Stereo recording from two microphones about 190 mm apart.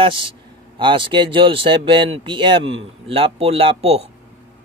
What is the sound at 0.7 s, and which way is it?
Speech, 25° right (ahead or behind).